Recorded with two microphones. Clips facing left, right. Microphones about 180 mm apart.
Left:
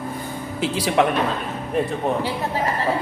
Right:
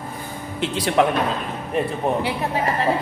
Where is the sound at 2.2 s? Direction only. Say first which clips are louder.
Right 1 dB; 20° right (ahead or behind).